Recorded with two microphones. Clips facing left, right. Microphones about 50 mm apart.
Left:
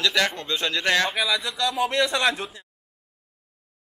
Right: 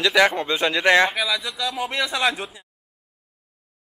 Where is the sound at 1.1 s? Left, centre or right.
Centre.